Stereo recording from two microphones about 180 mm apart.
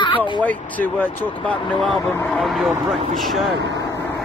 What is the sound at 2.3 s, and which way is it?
Speech, centre (ahead or behind).